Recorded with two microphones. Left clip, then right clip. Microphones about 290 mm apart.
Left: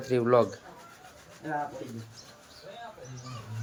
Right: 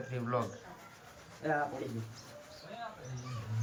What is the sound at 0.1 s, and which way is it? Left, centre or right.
Speech, centre.